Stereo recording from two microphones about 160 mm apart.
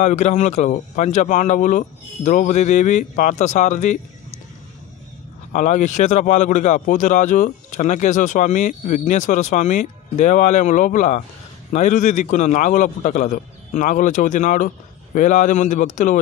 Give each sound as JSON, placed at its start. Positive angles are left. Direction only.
{"t": 0.0, "sound": "a man's voice", "side_deg": 45}
{"t": 5.5, "sound": "a man's voice", "side_deg": 50}